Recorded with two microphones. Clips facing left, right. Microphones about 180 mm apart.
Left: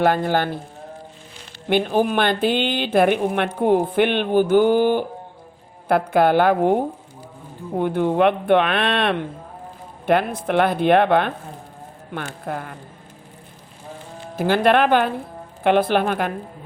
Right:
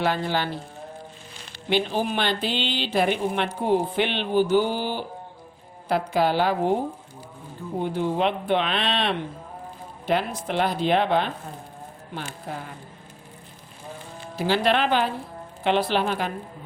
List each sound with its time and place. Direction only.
0.0 s a woman's voice: 50° left (ahead or behind)
1.7 s a woman's voice: 50° left (ahead or behind)
14.3 s a woman's voice: 50° left (ahead or behind)